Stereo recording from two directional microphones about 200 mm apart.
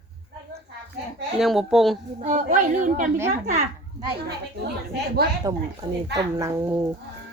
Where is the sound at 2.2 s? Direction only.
40° right (ahead or behind).